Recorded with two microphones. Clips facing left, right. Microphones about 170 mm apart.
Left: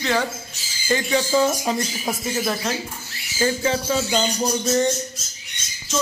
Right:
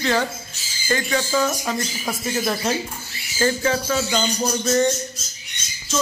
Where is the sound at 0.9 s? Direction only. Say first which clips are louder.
Left 2 dB; 15° left (ahead or behind).